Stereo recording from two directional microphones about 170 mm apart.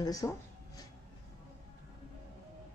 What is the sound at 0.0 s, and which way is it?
Speech, 20° left (ahead or behind).